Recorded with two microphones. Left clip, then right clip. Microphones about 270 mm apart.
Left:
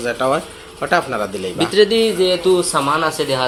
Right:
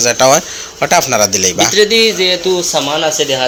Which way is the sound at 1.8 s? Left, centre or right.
Centre.